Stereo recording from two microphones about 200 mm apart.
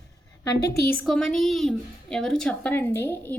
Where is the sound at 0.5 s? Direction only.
55° left (ahead or behind).